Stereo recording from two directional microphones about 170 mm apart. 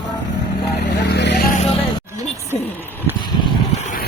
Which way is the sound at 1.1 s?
80° left.